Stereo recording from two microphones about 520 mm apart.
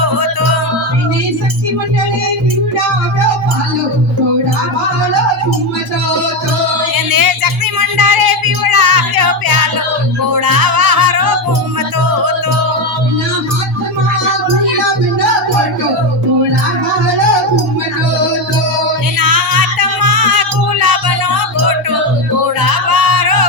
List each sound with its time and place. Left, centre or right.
6.9 s music: right
19.2 s music: right
22.6 s music: right